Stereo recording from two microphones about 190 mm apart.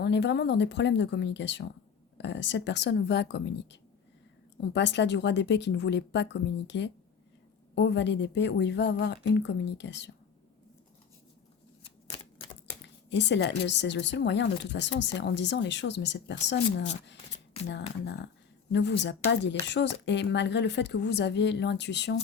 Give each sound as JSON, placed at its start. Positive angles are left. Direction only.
{"t": 0.0, "sound": "a woman's voice", "side_deg": 65}
{"t": 11.8, "sound": "shuffling cards", "side_deg": 30}
{"t": 12.8, "sound": "a woman's voice", "side_deg": 65}
{"t": 18.0, "sound": "speech", "side_deg": 65}